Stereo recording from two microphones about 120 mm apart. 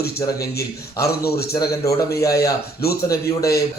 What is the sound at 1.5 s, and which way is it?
Speech, 30° left (ahead or behind).